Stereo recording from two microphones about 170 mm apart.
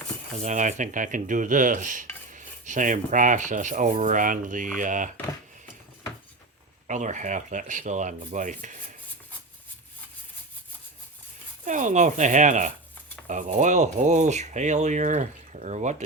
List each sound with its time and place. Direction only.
0.4 s dishes: 45° right (ahead or behind)
6.8 s dishes: 45° right (ahead or behind)
11.6 s dishes: 45° right (ahead or behind)